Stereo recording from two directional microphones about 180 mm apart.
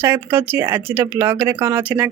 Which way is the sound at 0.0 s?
10° right (ahead or behind).